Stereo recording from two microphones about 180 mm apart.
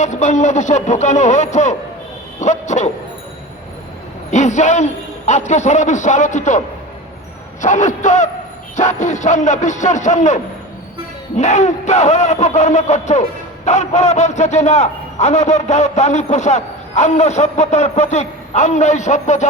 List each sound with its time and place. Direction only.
0.0 s a man's voice: 40° left (ahead or behind)
2.4 s dog: 40° left (ahead or behind)
4.3 s a man's voice: 40° left (ahead or behind)
7.6 s a man's voice: 45° left (ahead or behind)